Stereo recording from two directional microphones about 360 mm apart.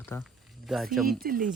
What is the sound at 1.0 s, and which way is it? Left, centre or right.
Speech, right.